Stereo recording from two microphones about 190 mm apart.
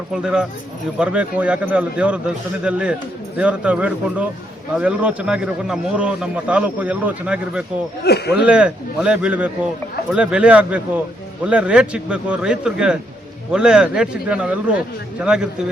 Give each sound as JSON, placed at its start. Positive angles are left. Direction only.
{"t": 0.1, "sound": "a man's voice", "side_deg": -5}
{"t": 8.0, "sound": "speech", "side_deg": 60}
{"t": 8.4, "sound": "a man's voice", "side_deg": -5}